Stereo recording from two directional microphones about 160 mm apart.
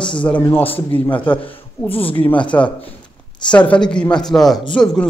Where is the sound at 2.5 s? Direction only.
15° left (ahead or behind).